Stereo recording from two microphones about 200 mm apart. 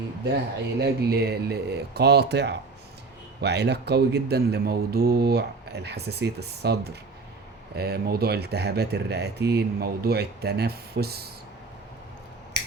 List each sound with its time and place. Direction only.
0.8 s speech: 55° right (ahead or behind)